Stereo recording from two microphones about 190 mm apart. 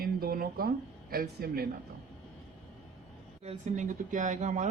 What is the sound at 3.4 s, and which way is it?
Speech, 35° right (ahead or behind).